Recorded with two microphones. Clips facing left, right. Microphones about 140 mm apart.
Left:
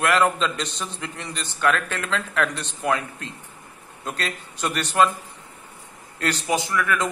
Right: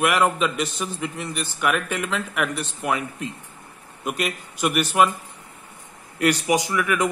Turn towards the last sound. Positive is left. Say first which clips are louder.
# right 1 dB
turn(degrees=-15)  # may be behind; listen again after turning